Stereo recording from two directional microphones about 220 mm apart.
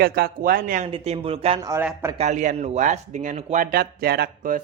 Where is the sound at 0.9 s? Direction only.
25° right (ahead or behind).